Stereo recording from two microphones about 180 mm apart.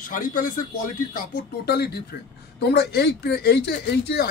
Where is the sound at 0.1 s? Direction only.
45° left (ahead or behind).